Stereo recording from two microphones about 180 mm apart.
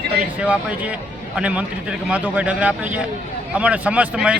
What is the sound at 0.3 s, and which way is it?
A man's voice, 5° right (ahead or behind).